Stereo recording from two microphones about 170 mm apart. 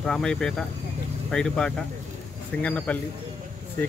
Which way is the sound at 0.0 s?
5° left (ahead or behind).